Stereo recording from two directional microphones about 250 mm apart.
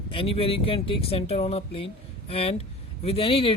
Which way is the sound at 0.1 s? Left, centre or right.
Left.